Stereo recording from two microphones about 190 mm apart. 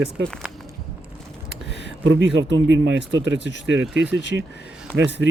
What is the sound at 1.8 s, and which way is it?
Speech, 80° right.